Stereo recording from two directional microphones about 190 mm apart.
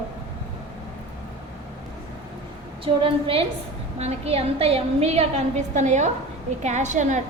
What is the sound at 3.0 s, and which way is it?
A woman's voice, 30° right (ahead or behind).